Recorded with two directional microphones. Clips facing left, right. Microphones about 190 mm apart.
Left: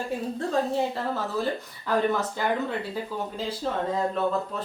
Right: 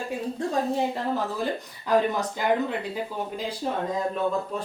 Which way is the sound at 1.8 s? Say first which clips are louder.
Right 1 dB; 15° right (ahead or behind).